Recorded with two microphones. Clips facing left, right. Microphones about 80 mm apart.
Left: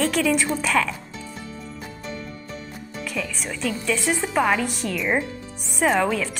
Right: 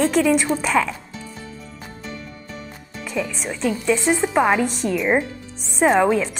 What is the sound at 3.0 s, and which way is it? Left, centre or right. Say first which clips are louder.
A woman's voice: right 4 dB; right.